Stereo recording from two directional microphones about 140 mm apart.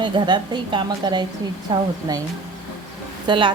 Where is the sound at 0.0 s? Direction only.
35° right (ahead or behind).